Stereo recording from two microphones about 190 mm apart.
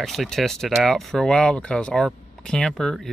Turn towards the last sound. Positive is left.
turn(degrees=0)  # may be behind; listen again after turning